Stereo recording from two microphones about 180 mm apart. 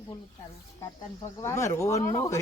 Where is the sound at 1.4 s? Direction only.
15° left (ahead or behind).